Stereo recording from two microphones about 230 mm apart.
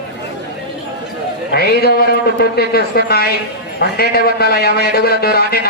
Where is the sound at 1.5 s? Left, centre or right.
Left.